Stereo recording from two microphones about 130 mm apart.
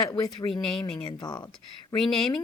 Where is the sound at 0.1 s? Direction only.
30° left (ahead or behind).